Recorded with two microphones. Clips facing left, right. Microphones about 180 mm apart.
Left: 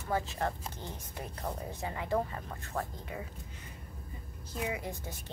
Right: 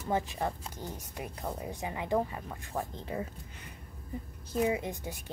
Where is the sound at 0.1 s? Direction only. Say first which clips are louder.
Right 1 dB; 15° right (ahead or behind).